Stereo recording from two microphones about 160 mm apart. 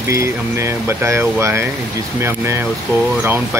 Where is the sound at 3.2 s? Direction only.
15° right (ahead or behind).